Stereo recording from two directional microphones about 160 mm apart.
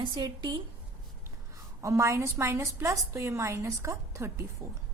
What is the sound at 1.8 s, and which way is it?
A woman's voice, 20° right (ahead or behind).